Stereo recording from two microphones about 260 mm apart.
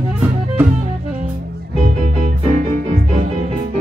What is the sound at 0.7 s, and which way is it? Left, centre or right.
Music, right.